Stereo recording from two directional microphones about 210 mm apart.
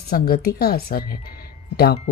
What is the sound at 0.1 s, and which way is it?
Speech, 45° left (ahead or behind).